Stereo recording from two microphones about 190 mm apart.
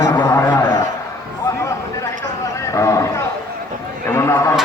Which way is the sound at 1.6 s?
15° left (ahead or behind).